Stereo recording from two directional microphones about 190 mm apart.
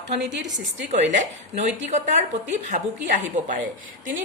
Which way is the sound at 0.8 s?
40° right (ahead or behind).